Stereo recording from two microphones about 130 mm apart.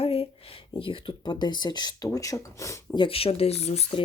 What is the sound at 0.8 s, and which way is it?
Speech, 40° left (ahead or behind).